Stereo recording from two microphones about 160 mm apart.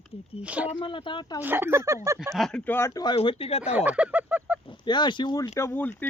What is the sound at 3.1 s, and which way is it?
Speech, 35° left (ahead or behind).